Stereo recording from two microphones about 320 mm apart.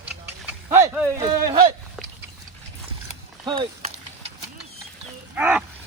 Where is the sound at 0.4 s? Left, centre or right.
Centre.